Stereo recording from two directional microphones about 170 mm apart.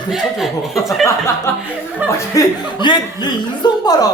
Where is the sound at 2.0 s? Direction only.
10° right (ahead or behind).